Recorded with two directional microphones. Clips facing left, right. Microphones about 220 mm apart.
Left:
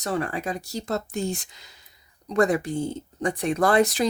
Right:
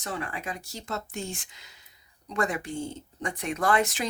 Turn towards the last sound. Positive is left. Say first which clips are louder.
# left 6 dB
turn(degrees=35)  # may be behind; listen again after turning